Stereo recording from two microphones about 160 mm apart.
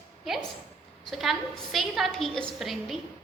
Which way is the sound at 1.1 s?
Centre (ahead or behind).